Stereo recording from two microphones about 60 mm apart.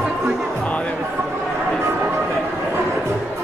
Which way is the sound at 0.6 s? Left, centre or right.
Left.